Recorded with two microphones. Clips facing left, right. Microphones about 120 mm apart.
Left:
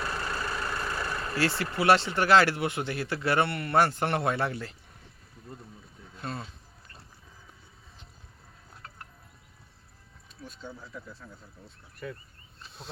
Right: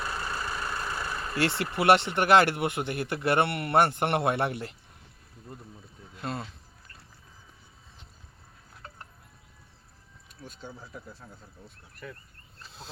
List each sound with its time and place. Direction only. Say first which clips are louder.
0.0 s vehicle: left 1 dB; 10° right (ahead or behind)
1.4 s speech: right 1 dB; 20° right (ahead or behind)
6.2 s speech: right 2 dB; 30° right (ahead or behind)